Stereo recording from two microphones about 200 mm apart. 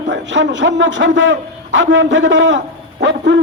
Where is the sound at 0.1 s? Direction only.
65° right (ahead or behind).